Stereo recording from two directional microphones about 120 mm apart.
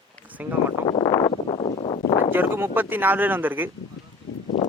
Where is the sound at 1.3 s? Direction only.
55° left (ahead or behind).